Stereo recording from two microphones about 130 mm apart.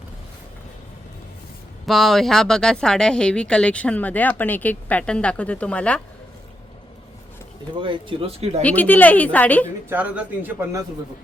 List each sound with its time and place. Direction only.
1.9 s speech: centre (ahead or behind)
7.8 s speech: 40° right (ahead or behind)
8.6 s speech: 15° left (ahead or behind)
9.9 s speech: 10° right (ahead or behind)